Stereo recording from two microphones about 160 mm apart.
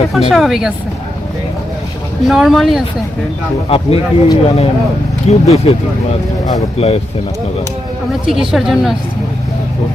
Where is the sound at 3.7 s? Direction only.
35° left (ahead or behind).